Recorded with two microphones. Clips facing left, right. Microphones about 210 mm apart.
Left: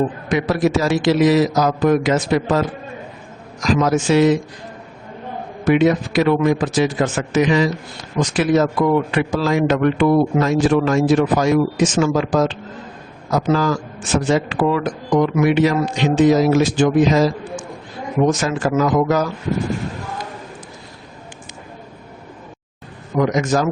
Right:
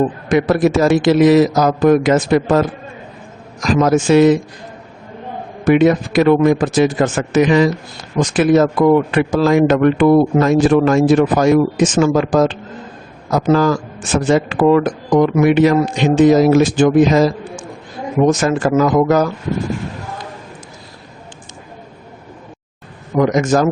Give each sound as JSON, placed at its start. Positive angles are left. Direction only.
{"t": 0.3, "sound": "speech", "side_deg": -50}
{"t": 5.6, "sound": "speech", "side_deg": -50}
{"t": 23.1, "sound": "speech", "side_deg": -50}